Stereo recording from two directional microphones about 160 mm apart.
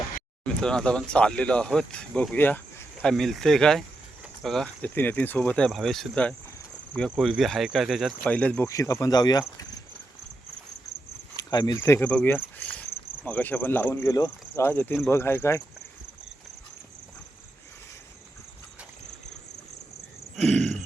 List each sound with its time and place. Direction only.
0.4 s speech: 5° left (ahead or behind); by 9.6 s 25° left (ahead or behind)
11.3 s a sound: 25° left (ahead or behind)
11.8 s speech: 15° left (ahead or behind)
20.3 s throat clearing: 5° left (ahead or behind)